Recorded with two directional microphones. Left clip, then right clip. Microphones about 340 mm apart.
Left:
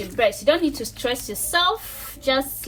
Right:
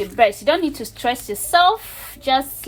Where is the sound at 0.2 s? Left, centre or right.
Right.